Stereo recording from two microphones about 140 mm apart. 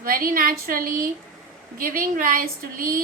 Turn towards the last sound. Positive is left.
turn(degrees=-85)